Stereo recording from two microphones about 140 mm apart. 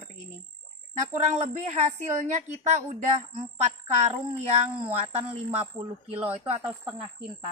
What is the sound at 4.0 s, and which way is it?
A woman's voice, 50° right (ahead or behind).